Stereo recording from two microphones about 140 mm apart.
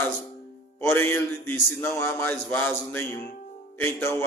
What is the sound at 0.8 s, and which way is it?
A man's voice, 20° left (ahead or behind).